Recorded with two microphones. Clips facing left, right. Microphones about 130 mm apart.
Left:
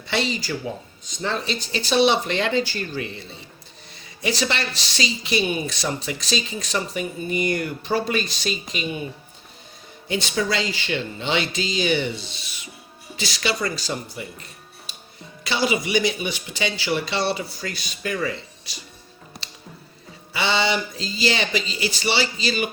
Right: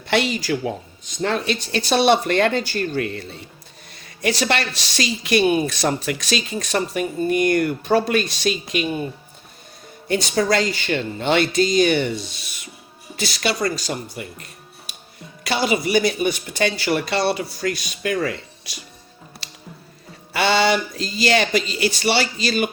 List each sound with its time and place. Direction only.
0.1 s speech: 55° right (ahead or behind)
10.1 s speech: 45° right (ahead or behind)
15.4 s speech: 50° right (ahead or behind)
20.3 s speech: 55° right (ahead or behind)